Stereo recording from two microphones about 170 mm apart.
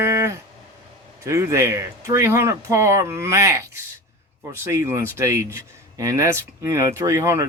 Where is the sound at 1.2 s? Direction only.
15° right (ahead or behind).